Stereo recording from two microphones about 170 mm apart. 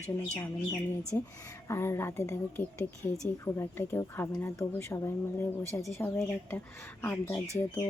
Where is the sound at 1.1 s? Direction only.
15° left (ahead or behind).